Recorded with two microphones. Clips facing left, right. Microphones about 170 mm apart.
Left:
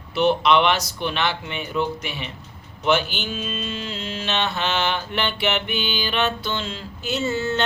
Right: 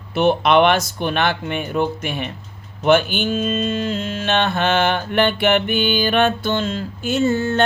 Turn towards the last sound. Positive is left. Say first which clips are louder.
# right 6 dB
turn(degrees=-50)  # may be behind; listen again after turning